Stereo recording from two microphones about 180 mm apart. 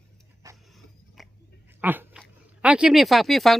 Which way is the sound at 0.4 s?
20° right (ahead or behind).